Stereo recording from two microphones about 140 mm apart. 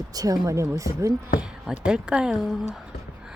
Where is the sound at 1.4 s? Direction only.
5° right (ahead or behind).